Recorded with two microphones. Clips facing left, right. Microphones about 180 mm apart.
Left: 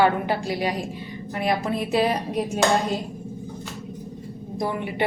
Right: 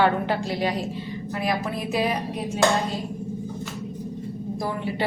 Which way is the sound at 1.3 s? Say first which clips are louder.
Left 3 dB; 25° left (ahead or behind).